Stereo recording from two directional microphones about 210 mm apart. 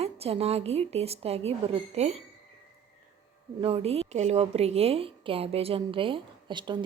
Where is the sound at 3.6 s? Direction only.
25° right (ahead or behind).